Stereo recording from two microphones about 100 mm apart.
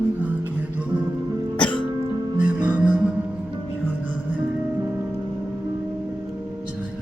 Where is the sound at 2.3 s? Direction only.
10° right (ahead or behind).